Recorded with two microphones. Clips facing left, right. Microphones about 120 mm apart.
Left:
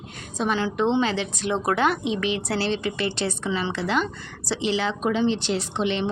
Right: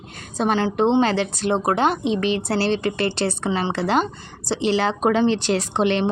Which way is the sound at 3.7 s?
35° right (ahead or behind).